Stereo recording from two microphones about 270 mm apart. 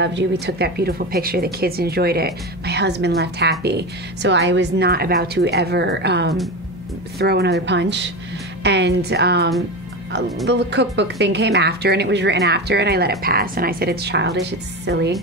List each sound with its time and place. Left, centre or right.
0.0 s speech: right